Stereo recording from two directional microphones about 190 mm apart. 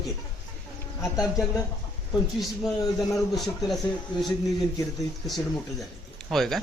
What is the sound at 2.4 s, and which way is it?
Speech, centre (ahead or behind).